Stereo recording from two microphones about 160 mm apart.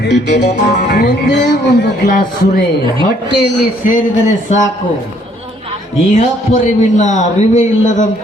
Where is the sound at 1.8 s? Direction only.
65° left (ahead or behind).